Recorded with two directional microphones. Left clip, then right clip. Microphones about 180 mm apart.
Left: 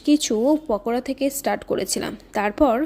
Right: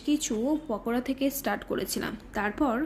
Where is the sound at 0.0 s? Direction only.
40° left (ahead or behind).